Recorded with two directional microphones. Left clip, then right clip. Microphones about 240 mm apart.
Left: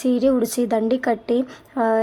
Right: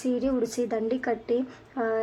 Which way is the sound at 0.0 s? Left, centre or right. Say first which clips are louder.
Left 8 dB; left.